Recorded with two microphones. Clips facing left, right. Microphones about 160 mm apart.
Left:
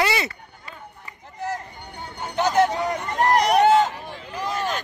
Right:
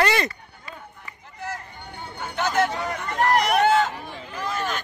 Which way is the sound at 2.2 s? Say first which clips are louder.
Left 4 dB; 20° left (ahead or behind).